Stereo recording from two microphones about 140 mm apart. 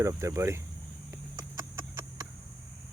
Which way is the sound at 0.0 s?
20° right (ahead or behind).